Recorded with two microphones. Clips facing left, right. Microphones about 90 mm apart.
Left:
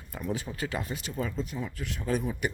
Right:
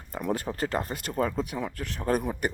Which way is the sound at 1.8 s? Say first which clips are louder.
Right 3 dB; 50° right (ahead or behind).